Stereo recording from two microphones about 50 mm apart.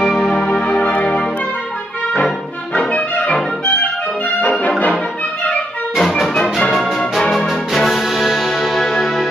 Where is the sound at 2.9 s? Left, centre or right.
Left.